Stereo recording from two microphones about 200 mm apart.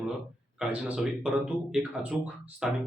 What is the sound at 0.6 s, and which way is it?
A man's voice, 5° right (ahead or behind).